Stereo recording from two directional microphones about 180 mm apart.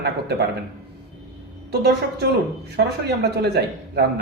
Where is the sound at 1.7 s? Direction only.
65° right (ahead or behind).